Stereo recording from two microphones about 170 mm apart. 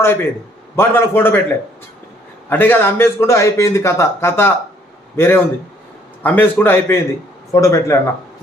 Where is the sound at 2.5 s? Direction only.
10° left (ahead or behind).